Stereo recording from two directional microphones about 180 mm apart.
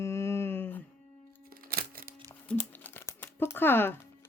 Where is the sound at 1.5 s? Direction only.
55° right (ahead or behind).